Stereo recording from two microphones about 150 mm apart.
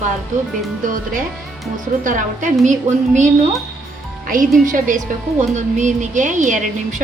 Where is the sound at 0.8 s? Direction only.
65° right (ahead or behind).